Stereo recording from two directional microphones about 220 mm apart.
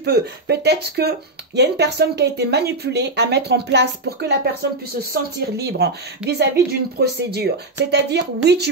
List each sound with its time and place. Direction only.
0.0 s speech: 50° right (ahead or behind)